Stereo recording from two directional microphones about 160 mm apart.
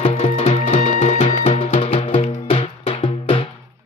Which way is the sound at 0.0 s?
40° left (ahead or behind).